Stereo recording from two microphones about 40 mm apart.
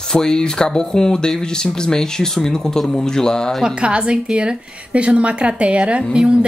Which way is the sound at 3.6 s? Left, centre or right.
Right.